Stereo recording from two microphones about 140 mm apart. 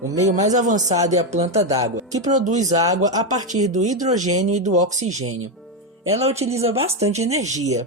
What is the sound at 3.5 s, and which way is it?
Speech, 60° right (ahead or behind).